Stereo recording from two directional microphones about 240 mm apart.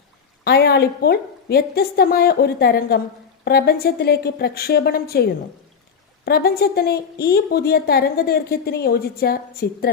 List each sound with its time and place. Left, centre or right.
0.4 s speech: left